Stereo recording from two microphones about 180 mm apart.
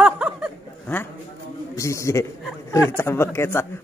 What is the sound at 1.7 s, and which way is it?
A man's voice, 15° left (ahead or behind).